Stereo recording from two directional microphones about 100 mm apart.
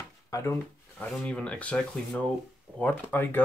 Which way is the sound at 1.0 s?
10° left (ahead or behind).